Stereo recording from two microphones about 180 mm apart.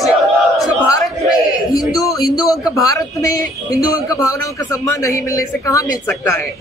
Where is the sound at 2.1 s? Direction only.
20° left (ahead or behind).